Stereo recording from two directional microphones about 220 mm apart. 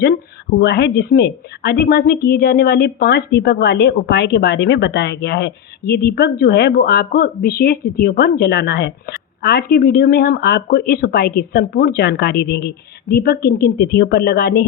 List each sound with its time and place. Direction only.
0.6 s a woman's voice: 50° left (ahead or behind)